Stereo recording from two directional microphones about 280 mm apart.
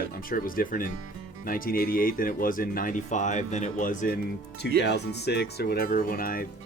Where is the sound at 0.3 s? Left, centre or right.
Left.